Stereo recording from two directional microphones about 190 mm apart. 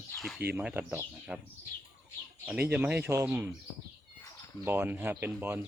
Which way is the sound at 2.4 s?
10° right (ahead or behind).